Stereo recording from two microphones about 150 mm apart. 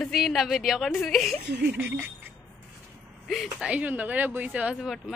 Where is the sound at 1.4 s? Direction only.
90° right.